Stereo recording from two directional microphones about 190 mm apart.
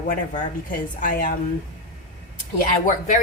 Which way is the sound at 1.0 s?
45° left (ahead or behind).